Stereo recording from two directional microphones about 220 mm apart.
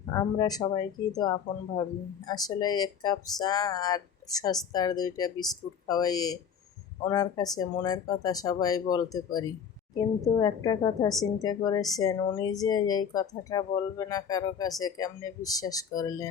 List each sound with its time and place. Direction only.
0.2 s speech: 15° left (ahead or behind)